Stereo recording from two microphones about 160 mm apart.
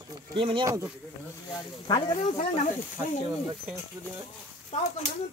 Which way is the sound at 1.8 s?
25° left (ahead or behind).